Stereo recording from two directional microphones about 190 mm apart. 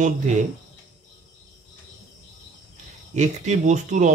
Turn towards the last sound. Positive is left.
turn(degrees=-40)  # may be behind; listen again after turning